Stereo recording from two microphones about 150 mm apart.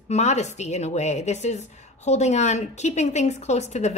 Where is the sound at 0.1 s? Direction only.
50° left (ahead or behind).